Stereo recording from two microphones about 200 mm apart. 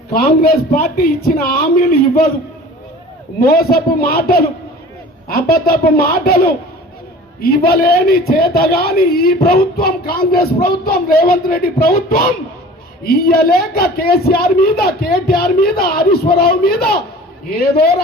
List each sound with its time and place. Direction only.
0.1 s speech: 50° left (ahead or behind)
3.4 s speech: 50° left (ahead or behind)